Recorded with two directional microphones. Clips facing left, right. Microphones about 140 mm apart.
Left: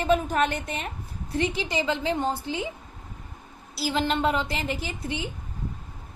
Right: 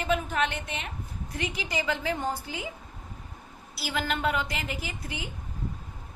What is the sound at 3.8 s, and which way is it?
A woman's voice, 25° left (ahead or behind).